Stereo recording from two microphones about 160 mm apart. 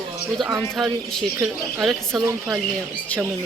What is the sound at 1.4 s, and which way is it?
Speech, 5° right (ahead or behind).